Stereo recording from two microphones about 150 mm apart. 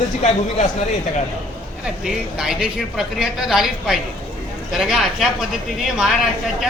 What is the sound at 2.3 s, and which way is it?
A woman's voice, 5° right (ahead or behind).